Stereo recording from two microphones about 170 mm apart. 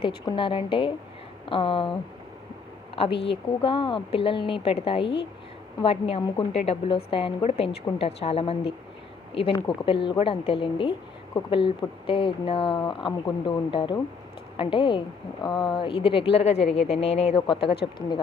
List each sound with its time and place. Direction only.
0.0 s speech: 30° left (ahead or behind)
3.2 s speech: 30° left (ahead or behind)